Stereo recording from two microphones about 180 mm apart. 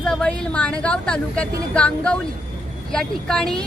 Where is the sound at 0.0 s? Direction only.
5° left (ahead or behind).